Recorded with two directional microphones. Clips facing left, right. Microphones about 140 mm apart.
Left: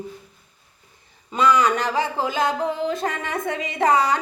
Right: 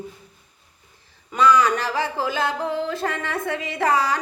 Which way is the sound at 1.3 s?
20° left (ahead or behind).